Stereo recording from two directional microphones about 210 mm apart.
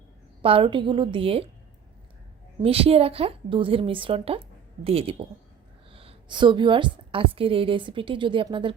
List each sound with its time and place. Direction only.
0.4 s a woman's voice: 25° right (ahead or behind)
2.6 s a woman's voice: 25° right (ahead or behind)